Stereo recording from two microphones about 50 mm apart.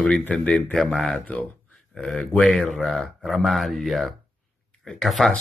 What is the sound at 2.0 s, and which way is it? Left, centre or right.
A man's voice, centre.